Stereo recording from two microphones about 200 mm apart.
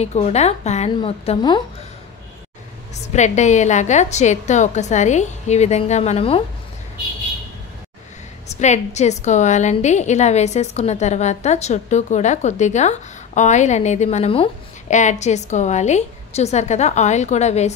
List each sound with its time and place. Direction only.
0.0 s a woman's voice: 35° left (ahead or behind)
3.1 s a woman's voice: 35° left (ahead or behind)
8.5 s a woman's voice: 35° left (ahead or behind)